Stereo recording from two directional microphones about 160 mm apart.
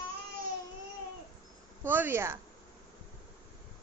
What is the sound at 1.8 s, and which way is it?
Speech, 15° right (ahead or behind).